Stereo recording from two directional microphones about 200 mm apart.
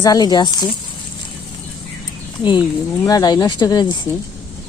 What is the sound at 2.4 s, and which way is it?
Speech, 25° left (ahead or behind).